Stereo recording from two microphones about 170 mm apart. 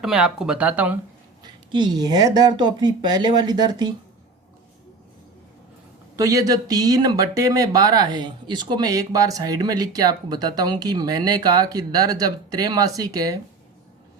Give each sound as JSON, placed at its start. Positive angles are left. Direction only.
{"t": 0.0, "sound": "speech", "side_deg": -5}
{"t": 1.4, "sound": "speech", "side_deg": -25}
{"t": 6.1, "sound": "speech", "side_deg": -20}